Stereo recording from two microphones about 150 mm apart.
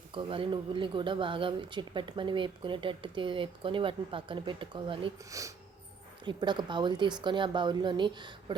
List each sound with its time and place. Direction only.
0.1 s speech: 35° right (ahead or behind)
5.3 s speech: 20° right (ahead or behind)